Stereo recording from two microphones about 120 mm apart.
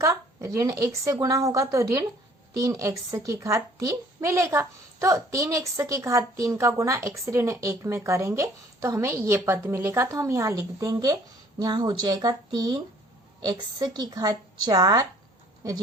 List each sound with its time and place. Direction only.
0.0 s a woman's voice: 25° right (ahead or behind)